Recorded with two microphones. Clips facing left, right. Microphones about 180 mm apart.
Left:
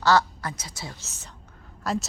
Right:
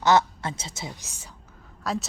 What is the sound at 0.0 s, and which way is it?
A woman's voice, 20° right (ahead or behind).